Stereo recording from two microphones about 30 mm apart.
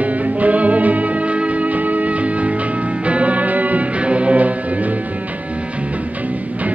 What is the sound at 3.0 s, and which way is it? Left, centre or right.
Music, right.